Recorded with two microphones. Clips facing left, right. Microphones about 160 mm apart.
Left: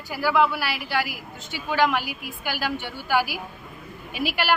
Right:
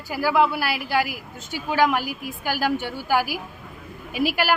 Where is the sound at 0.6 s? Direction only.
45° right (ahead or behind).